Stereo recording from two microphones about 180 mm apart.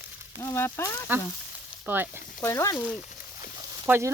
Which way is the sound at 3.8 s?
10° right (ahead or behind).